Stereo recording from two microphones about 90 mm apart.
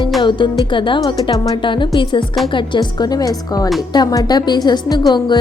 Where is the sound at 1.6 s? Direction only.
65° left (ahead or behind).